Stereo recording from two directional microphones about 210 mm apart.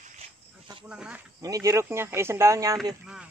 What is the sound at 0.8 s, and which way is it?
Speech, 5° right (ahead or behind).